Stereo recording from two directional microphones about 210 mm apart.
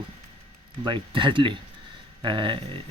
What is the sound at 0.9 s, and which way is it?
Speech, 25° right (ahead or behind).